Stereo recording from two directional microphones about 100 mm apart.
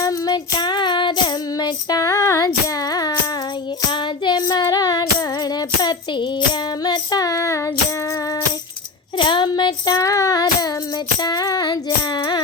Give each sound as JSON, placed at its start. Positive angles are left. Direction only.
{"t": 0.0, "sound": "child singing", "side_deg": 35}
{"t": 9.1, "sound": "child singing", "side_deg": 50}